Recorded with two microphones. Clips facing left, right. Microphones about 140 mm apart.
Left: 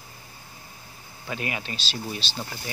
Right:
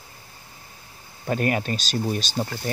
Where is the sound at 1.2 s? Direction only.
45° right (ahead or behind).